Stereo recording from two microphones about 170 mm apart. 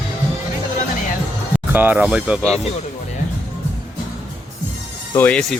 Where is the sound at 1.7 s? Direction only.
10° right (ahead or behind).